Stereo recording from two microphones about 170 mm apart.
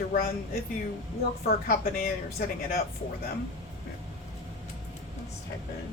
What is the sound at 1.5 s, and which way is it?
A woman's voice, 60° left (ahead or behind).